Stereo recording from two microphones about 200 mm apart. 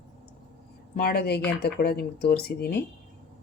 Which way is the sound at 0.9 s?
50° left (ahead or behind).